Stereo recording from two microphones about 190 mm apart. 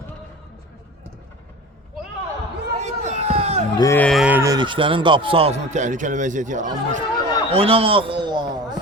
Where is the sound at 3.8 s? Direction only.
15° left (ahead or behind).